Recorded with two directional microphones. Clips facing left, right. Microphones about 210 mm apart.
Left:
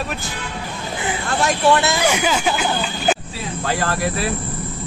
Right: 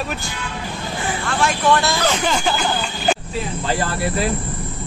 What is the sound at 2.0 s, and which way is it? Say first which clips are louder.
Speech: left 1 dB; 10° left (ahead or behind).